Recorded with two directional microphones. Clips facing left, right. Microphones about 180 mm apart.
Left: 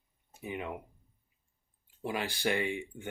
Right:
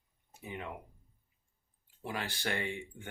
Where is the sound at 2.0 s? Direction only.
15° left (ahead or behind).